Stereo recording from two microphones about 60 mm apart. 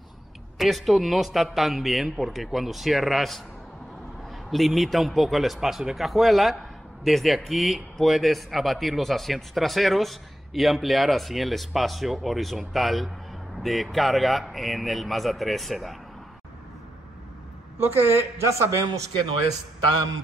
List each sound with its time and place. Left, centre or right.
0.6 s a man's voice: centre
17.7 s a woman's voice: right
18.4 s a man's voice: right